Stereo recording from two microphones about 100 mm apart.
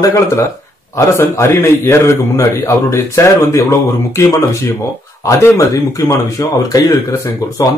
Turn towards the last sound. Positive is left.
turn(degrees=30)  # may be behind; listen again after turning